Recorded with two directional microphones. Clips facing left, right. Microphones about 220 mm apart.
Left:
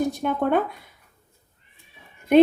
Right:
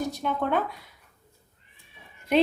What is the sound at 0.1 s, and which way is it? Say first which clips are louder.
Speech: left 5 dB; 55° left (ahead or behind).